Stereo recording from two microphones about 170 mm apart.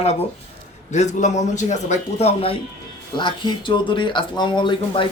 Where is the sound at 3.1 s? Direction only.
25° left (ahead or behind).